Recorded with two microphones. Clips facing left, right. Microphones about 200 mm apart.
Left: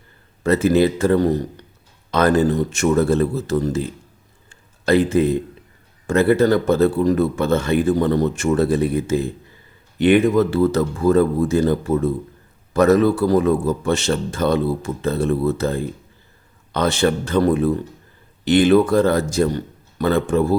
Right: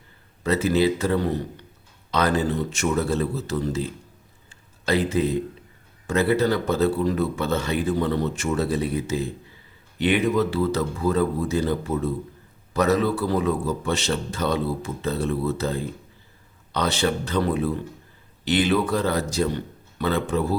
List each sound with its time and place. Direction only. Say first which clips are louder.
0.4 s a man's voice: left 5 dB; 50° left (ahead or behind)
4.4 s a sound: left 6 dB; 50° left (ahead or behind)
6.1 s a man's voice: left 6 dB; 50° left (ahead or behind)